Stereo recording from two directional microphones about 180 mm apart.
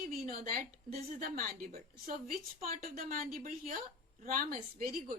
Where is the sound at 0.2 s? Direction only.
55° right (ahead or behind).